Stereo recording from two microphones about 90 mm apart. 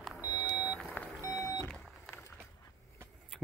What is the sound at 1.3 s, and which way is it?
Vehicle, 40° left (ahead or behind).